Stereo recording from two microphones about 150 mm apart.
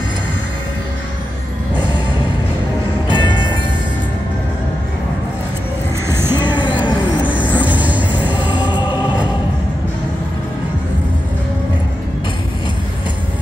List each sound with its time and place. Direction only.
3.1 s train: 30° left (ahead or behind)
6.0 s music: 15° right (ahead or behind)
6.3 s music: 30° left (ahead or behind)
7.2 s vehicle: 10° right (ahead or behind)
8.4 s music: 30° left (ahead or behind)